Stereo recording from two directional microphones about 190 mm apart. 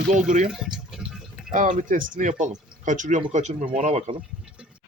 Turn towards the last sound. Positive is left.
turn(degrees=-35)  # may be behind; listen again after turning